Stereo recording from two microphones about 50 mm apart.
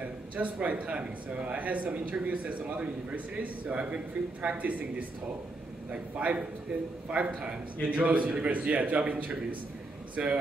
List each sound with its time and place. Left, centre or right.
0.0 s speech: right
10.2 s speech: centre